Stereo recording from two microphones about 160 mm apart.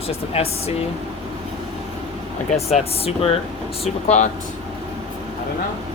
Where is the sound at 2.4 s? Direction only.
40° left (ahead or behind).